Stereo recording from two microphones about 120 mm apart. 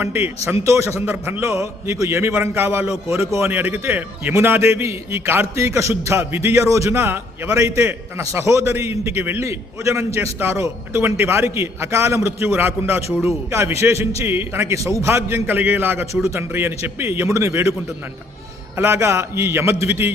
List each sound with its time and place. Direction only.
0.0 s a man's voice: 20° right (ahead or behind)
18.8 s a man's voice: 20° right (ahead or behind)